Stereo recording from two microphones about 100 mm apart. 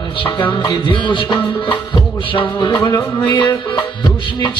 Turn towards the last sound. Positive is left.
turn(degrees=50)  # may be behind; listen again after turning